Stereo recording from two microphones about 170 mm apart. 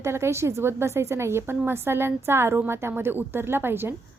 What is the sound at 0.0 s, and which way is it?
A woman's voice, 15° right (ahead or behind).